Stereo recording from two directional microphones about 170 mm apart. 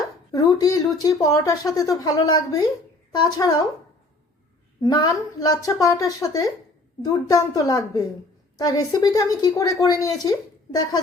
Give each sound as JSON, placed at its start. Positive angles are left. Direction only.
{"t": 0.3, "sound": "a woman's voice", "side_deg": 20}
{"t": 4.8, "sound": "a woman's voice", "side_deg": 25}